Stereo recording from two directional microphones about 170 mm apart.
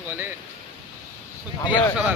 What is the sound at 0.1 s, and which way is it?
Speech, 15° right (ahead or behind).